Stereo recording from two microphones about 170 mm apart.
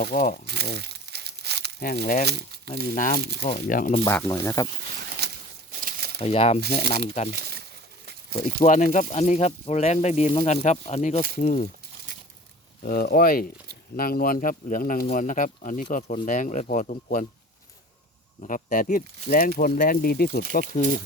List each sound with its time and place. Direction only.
0.0 s speech: 45° left (ahead or behind)
0.4 s crumpling: 75° right (ahead or behind)
1.8 s speech: 55° left (ahead or behind)
2.2 s speech: 75° right (ahead or behind)
2.9 s speech: 50° left (ahead or behind)
4.0 s speech: 15° left (ahead or behind)
5.2 s a sound: 65° right (ahead or behind)
5.8 s crumpling: 65° right (ahead or behind)
6.1 s speech: 35° left (ahead or behind)
7.3 s a sound: 70° right (ahead or behind)
8.4 s speech: 45° left (ahead or behind)
12.8 s speech: 60° left (ahead or behind)
18.4 s speech: 50° left (ahead or behind)